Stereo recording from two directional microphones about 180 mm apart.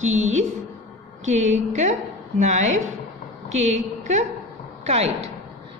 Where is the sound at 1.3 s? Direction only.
40° right (ahead or behind).